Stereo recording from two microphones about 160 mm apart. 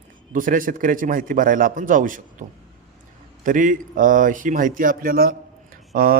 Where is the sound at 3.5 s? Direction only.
55° right (ahead or behind).